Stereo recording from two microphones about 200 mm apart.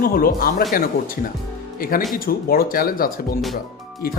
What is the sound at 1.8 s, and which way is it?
Speech, 45° left (ahead or behind).